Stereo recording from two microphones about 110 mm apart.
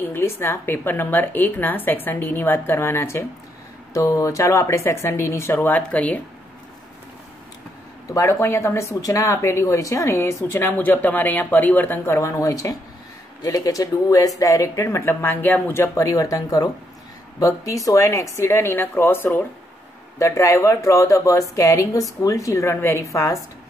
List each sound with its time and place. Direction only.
0.0 s speech: 20° left (ahead or behind)
8.1 s speech: 25° left (ahead or behind)
12.2 s speech: 30° left (ahead or behind)